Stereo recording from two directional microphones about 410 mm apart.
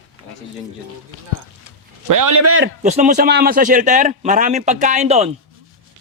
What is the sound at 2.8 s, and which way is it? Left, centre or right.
Speech, centre.